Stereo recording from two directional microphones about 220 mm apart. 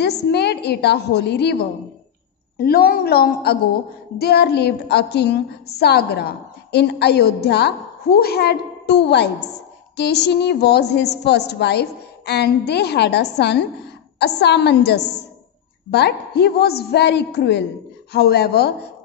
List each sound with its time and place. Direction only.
0.0 s a woman's voice: 50° left (ahead or behind)